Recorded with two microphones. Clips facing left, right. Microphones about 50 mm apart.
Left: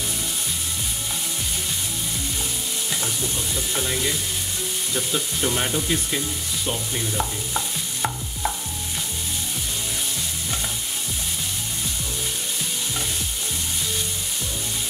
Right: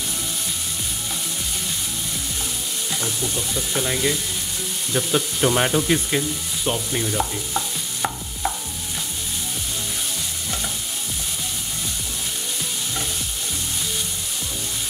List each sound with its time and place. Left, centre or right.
3.0 s frying: centre
4.9 s sizzle: right
7.2 s stir: centre